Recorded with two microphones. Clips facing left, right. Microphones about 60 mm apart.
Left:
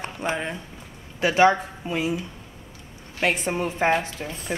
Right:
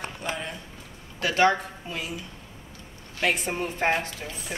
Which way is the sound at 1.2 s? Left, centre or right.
Centre.